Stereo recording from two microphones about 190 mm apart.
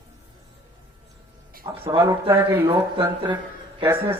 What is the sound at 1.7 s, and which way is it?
A man's voice, 15° right (ahead or behind).